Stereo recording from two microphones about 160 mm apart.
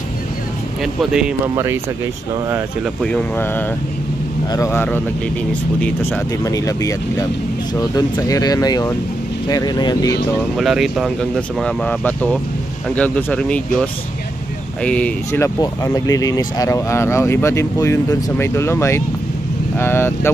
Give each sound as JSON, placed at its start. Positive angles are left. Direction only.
{"t": 1.1, "sound": "speech", "side_deg": -5}
{"t": 1.5, "sound": "speech", "side_deg": -15}
{"t": 3.0, "sound": "speech", "side_deg": 5}
{"t": 6.4, "sound": "speech", "side_deg": 20}
{"t": 10.6, "sound": "speech", "side_deg": -5}
{"t": 15.6, "sound": "speech", "side_deg": 25}